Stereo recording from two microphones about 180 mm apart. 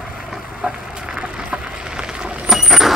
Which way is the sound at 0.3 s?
5° right (ahead or behind).